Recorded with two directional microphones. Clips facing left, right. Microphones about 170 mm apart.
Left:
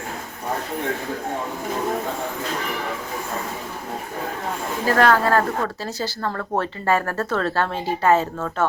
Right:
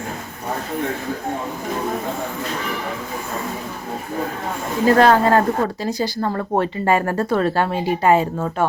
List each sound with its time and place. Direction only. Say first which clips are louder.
4.9 s a woman's voice: right 4 dB; 25° right (ahead or behind)